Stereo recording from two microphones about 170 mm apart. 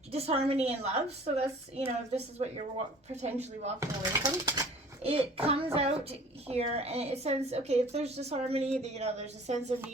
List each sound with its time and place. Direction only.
0.1 s a woman's voice: 35° right (ahead or behind)
3.8 s speech: 20° right (ahead or behind)
5.0 s a woman's voice: 35° right (ahead or behind)